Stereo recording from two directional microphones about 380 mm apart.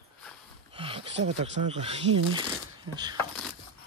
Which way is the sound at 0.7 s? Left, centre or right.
Centre.